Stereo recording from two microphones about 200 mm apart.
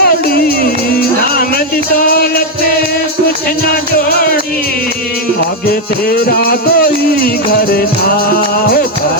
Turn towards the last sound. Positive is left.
turn(degrees=50)  # may be behind; listen again after turning